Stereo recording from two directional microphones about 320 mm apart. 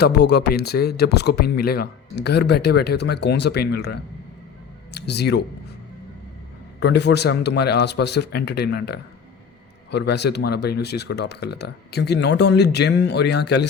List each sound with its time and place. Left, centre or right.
0.0 s speech: left
6.7 s speech: left